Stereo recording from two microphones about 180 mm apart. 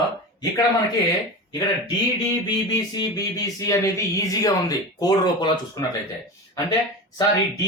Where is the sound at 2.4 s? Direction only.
20° left (ahead or behind).